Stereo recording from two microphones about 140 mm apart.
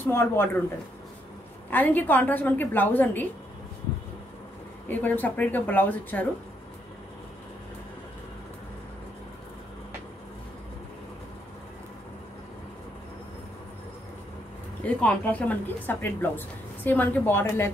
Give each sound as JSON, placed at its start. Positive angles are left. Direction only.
{"t": 0.0, "sound": "a woman's voice", "side_deg": 15}
{"t": 1.7, "sound": "a woman's voice", "side_deg": 10}
{"t": 4.8, "sound": "a woman's voice", "side_deg": 10}
{"t": 15.0, "sound": "a woman's voice", "side_deg": 10}